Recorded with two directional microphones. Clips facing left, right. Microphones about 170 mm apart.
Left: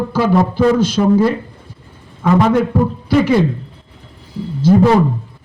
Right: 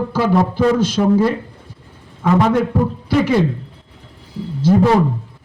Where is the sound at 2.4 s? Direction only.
90° left.